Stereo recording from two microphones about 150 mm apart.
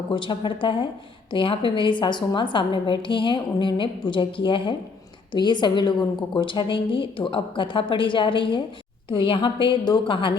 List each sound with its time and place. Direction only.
0.1 s a woman's voice: 30° left (ahead or behind)